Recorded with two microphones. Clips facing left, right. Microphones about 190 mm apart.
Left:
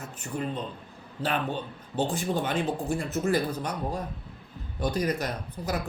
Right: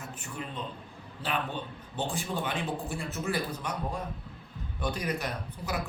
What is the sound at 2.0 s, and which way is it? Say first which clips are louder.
A man's voice: left 5 dB; 40° left (ahead or behind).